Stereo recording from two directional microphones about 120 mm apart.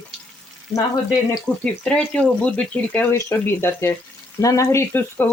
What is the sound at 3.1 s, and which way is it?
Frying, 20° left (ahead or behind).